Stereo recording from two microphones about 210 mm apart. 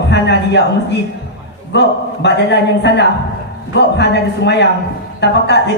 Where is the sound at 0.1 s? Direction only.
55° left (ahead or behind).